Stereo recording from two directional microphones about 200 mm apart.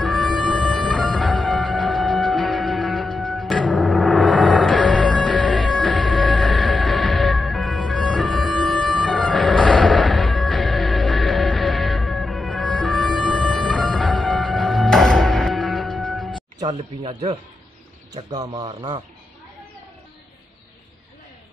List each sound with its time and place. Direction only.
0.0 s music: 5° left (ahead or behind)
16.5 s speech: 20° right (ahead or behind)
18.1 s a man's voice: 20° right (ahead or behind)